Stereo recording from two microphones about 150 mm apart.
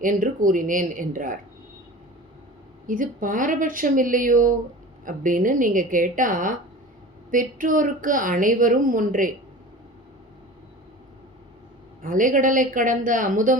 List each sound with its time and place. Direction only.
0.0 s a woman's voice: 60° right (ahead or behind)
2.8 s a woman's voice: 65° right (ahead or behind)
12.0 s a woman's voice: 60° right (ahead or behind)